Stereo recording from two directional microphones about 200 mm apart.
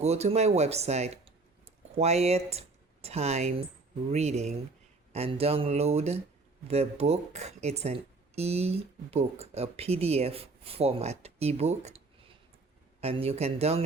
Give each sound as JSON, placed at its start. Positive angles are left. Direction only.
{"t": 0.0, "sound": "speech", "side_deg": -30}